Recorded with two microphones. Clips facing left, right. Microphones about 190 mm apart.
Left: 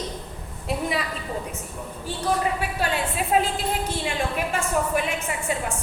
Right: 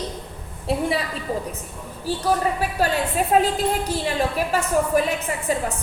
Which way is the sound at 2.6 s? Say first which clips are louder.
Right 4 dB; 40° right (ahead or behind).